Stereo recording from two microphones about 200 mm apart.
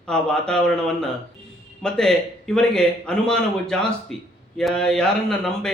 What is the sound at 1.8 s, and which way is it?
Speech, 5° left (ahead or behind).